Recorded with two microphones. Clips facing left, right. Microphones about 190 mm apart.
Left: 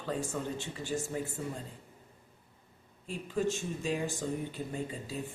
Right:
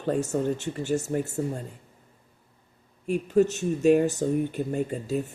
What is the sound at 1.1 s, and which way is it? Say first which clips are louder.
Speech: right 8 dB; 55° right (ahead or behind).